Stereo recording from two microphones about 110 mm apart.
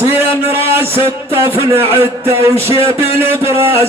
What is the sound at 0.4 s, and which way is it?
A man's voice, 20° right (ahead or behind).